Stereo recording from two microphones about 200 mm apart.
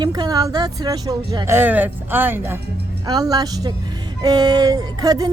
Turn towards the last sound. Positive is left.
turn(degrees=-20)  # may be behind; listen again after turning